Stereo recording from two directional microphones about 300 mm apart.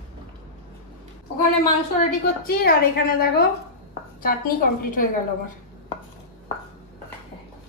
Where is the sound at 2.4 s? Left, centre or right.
Left.